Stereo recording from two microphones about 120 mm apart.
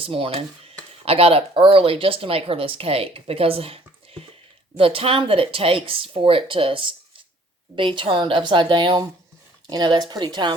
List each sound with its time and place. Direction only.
0.0 s speech: 50° right (ahead or behind)